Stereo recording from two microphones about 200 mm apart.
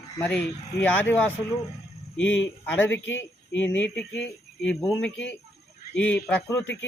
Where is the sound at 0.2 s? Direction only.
5° left (ahead or behind).